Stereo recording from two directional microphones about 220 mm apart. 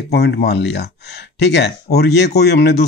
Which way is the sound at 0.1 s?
50° left (ahead or behind).